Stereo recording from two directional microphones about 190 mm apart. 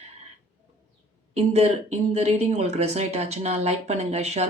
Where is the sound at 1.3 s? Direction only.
35° right (ahead or behind).